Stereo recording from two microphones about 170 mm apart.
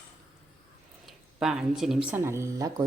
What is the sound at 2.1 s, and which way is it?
Speech, 15° right (ahead or behind).